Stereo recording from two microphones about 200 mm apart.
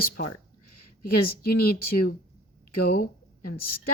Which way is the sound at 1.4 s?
50° left (ahead or behind).